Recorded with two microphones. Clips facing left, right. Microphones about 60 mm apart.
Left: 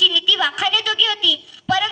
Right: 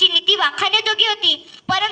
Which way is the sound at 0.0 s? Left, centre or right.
Right.